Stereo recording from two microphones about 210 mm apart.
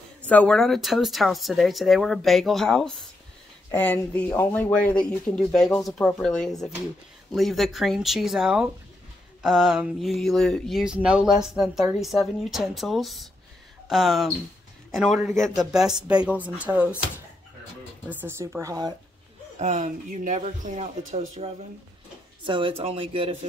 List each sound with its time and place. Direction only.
0.3 s speech: 5° left (ahead or behind)
18.1 s speech: 10° right (ahead or behind)
19.6 s speech: 35° right (ahead or behind)
22.5 s speech: 25° right (ahead or behind)